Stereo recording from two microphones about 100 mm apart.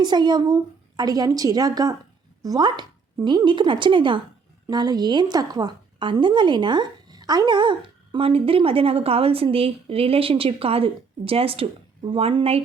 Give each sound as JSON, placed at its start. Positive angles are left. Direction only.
{"t": 0.0, "sound": "a woman's voice", "side_deg": -45}
{"t": 4.7, "sound": "a woman's voice", "side_deg": -45}